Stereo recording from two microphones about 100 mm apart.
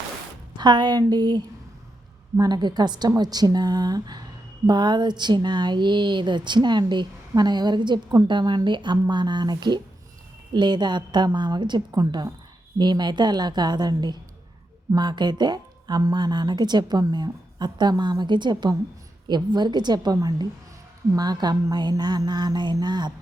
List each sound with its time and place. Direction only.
0.5 s a woman's voice: 45° right (ahead or behind)